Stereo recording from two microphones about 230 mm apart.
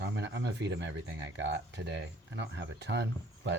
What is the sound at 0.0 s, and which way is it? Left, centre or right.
Speech, right.